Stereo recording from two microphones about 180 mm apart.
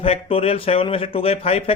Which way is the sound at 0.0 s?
30° left (ahead or behind).